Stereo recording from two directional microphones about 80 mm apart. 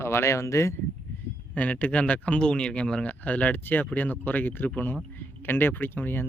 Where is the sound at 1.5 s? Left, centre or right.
Centre.